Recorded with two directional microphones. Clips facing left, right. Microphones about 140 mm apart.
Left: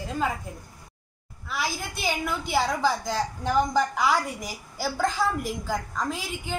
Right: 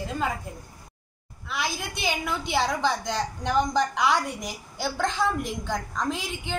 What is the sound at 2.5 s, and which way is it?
A woman's voice, 5° left (ahead or behind).